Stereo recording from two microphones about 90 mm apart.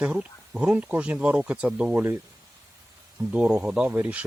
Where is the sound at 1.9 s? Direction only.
25° right (ahead or behind).